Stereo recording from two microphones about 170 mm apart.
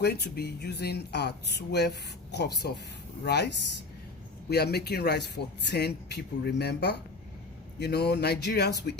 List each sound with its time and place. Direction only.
0.0 s speech: 75° left (ahead or behind)